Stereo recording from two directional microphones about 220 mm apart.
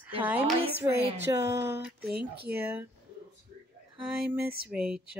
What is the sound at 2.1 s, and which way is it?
Speech, 45° right (ahead or behind).